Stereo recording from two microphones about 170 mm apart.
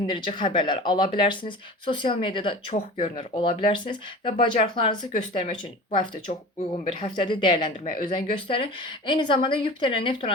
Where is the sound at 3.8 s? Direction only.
30° left (ahead or behind).